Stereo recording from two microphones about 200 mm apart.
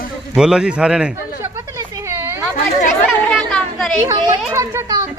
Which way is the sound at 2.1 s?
15° right (ahead or behind).